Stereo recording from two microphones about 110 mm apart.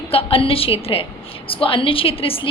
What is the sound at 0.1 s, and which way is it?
A woman's voice, 60° left (ahead or behind).